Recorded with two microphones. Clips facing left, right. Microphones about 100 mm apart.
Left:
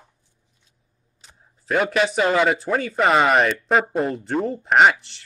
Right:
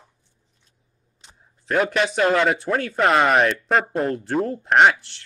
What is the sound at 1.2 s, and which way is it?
Speech, centre (ahead or behind).